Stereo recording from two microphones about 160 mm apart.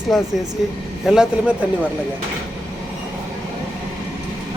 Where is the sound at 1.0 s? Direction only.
5° right (ahead or behind).